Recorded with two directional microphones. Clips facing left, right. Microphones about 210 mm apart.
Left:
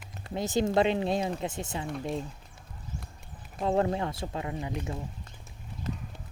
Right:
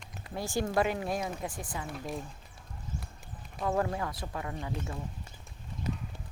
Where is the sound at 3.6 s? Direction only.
25° left (ahead or behind).